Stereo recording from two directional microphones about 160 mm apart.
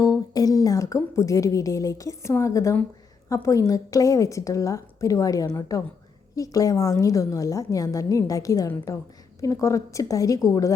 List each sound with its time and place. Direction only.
0.0 s a woman's voice: 20° left (ahead or behind)